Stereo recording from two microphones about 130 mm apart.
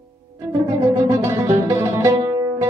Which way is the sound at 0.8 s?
25° right (ahead or behind).